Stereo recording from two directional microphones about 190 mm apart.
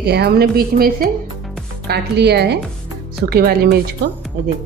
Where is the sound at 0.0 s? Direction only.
60° right (ahead or behind).